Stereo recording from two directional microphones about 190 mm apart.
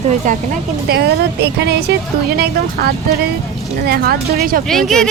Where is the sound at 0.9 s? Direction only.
60° right (ahead or behind).